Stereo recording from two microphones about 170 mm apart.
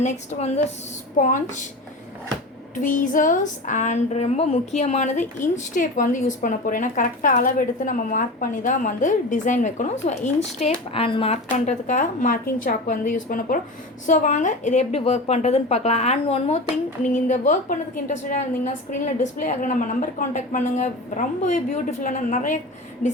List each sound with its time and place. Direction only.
0.0 s a woman's voice: 45° left (ahead or behind)
2.7 s speech: 50° left (ahead or behind); by 11.3 s 35° left (ahead or behind)
11.6 s a woman's voice: 45° left (ahead or behind)